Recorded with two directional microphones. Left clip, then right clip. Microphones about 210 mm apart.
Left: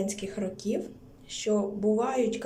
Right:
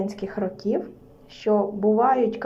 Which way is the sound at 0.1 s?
15° left (ahead or behind).